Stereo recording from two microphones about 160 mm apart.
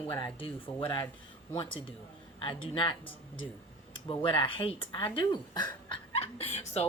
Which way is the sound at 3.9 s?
35° left (ahead or behind).